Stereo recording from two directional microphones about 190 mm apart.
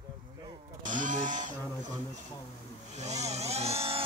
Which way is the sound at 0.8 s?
40° right (ahead or behind).